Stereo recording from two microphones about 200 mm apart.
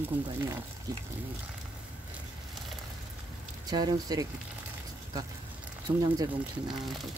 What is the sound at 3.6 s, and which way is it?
Speech, 20° right (ahead or behind).